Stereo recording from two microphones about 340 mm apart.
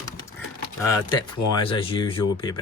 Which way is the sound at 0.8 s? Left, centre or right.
Centre.